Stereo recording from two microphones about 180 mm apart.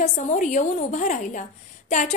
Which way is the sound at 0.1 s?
45° left (ahead or behind).